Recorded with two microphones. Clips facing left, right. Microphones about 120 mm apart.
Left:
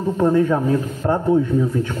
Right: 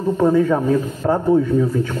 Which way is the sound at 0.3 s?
Centre (ahead or behind).